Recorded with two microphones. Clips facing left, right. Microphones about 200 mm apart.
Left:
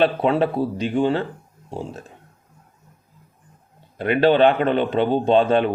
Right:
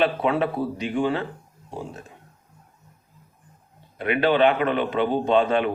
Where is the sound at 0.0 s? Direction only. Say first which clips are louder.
Left 3 dB; 30° left (ahead or behind).